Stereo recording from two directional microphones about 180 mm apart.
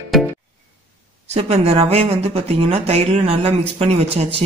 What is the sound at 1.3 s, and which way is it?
A man's voice, 35° right (ahead or behind).